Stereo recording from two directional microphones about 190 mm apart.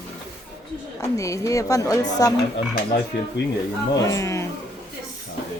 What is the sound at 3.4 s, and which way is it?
Speech, 65° left (ahead or behind).